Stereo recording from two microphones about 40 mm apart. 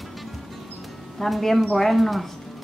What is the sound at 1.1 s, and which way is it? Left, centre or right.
Speech, centre.